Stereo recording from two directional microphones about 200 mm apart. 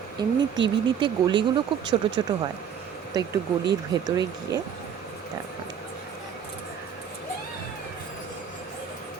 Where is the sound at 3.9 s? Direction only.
20° right (ahead or behind).